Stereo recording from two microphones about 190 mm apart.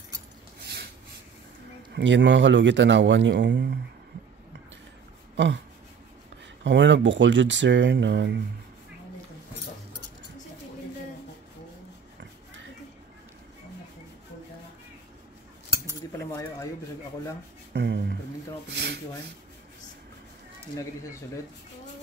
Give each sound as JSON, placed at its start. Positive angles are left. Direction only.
{"t": 0.6, "sound": "snort", "side_deg": -60}
{"t": 2.0, "sound": "speech", "side_deg": -70}
{"t": 5.3, "sound": "a sound", "side_deg": -65}
{"t": 6.6, "sound": "speech", "side_deg": -70}
{"t": 17.7, "sound": "speech", "side_deg": -60}
{"t": 20.7, "sound": "speech", "side_deg": 15}